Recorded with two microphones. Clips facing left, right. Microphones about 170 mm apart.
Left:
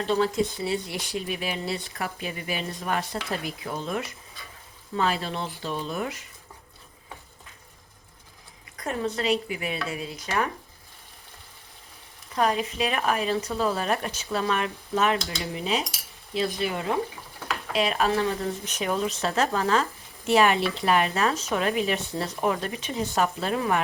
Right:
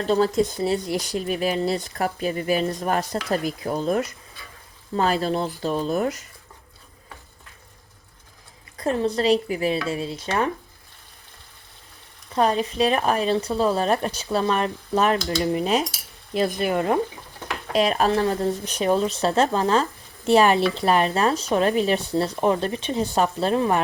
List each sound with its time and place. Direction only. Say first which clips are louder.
0.0 s speech: right 4 dB; 40° right (ahead or behind)
8.8 s speech: right 6 dB; 35° right (ahead or behind)
9.9 s stir: right 4 dB; 30° right (ahead or behind)
12.3 s speech: right 4 dB; 30° right (ahead or behind); by 15.9 s 50° right (ahead or behind)
16.3 s stir: right 5 dB; 50° right (ahead or behind)
17.7 s speech: right 4 dB; 40° right (ahead or behind)